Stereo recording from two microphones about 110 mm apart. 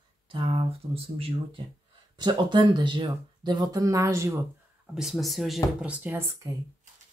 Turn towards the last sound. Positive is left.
turn(degrees=-20)  # may be behind; listen again after turning